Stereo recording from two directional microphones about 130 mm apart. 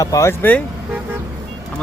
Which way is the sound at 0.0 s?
25° left (ahead or behind).